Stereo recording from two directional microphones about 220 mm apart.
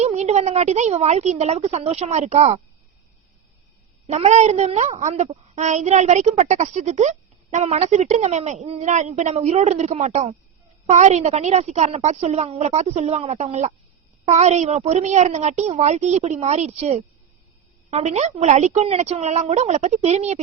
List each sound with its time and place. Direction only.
0.0 s a woman's voice: 30° right (ahead or behind)
4.0 s a woman's voice: 30° right (ahead or behind)